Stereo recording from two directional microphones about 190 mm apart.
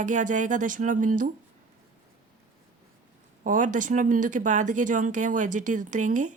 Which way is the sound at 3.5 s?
40° right (ahead or behind).